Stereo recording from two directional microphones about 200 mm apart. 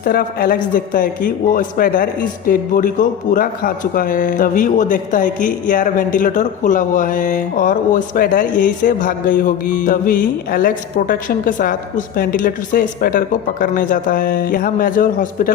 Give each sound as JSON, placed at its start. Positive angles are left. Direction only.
{"t": 0.0, "sound": "a man's voice", "side_deg": 45}